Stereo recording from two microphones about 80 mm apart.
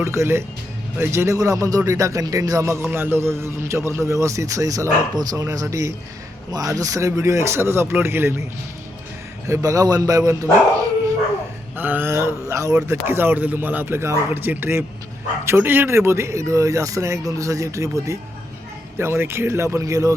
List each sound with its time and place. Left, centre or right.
0.0 s a man's voice: right
2.9 s a man's voice: right
9.5 s a man's voice: right
11.8 s a man's voice: right